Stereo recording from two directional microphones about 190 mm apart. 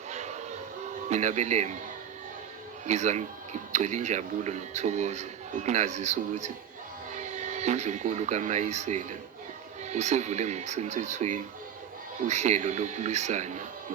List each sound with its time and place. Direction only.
0.1 s music: 35° right (ahead or behind)
1.1 s speech: 40° right (ahead or behind)
2.8 s speech: 35° right (ahead or behind)